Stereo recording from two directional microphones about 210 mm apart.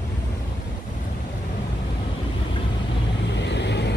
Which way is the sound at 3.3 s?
55° left (ahead or behind).